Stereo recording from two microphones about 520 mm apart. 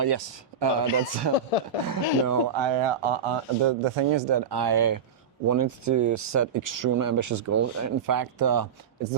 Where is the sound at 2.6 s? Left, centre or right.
Right.